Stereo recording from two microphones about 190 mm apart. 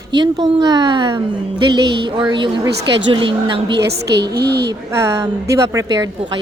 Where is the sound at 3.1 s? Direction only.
25° right (ahead or behind).